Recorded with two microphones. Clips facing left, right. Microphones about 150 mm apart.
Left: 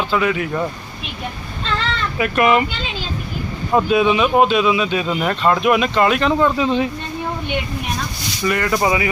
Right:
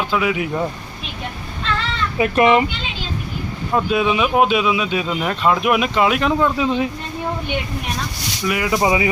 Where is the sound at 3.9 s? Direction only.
Centre (ahead or behind).